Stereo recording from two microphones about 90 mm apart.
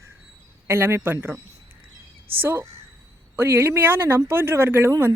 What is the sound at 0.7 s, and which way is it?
Speech, 25° right (ahead or behind).